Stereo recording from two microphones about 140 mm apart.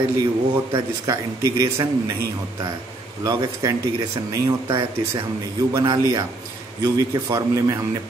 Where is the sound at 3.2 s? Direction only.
30° right (ahead or behind).